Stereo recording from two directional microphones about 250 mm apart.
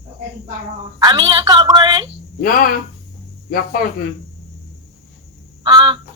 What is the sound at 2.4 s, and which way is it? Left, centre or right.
Speech, left.